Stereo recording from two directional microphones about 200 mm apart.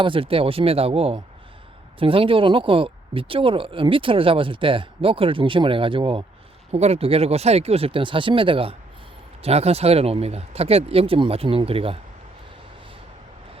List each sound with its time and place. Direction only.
0.0 s speech: 25° right (ahead or behind)